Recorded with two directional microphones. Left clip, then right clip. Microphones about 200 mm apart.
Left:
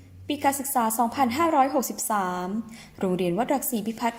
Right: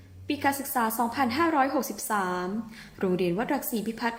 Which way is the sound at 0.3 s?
40° left (ahead or behind).